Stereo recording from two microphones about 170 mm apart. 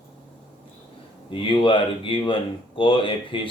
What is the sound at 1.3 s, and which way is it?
Speech, 30° left (ahead or behind).